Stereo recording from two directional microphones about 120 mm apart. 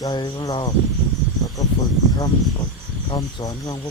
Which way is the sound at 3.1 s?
35° left (ahead or behind).